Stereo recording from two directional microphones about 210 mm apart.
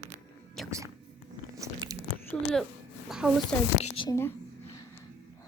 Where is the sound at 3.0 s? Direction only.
5° right (ahead or behind).